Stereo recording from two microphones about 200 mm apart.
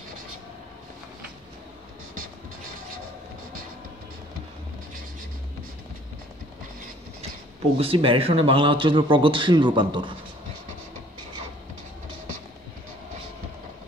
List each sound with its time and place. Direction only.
7.7 s speech: 30° right (ahead or behind)